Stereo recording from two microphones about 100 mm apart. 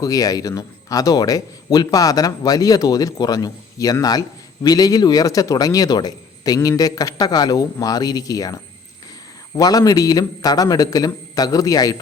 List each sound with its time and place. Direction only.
0.0 s speech: 40° left (ahead or behind)
9.6 s speech: 40° left (ahead or behind)